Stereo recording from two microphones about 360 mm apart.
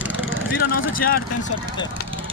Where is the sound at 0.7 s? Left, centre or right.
Left.